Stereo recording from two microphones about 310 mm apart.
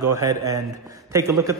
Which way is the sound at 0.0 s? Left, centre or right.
Centre.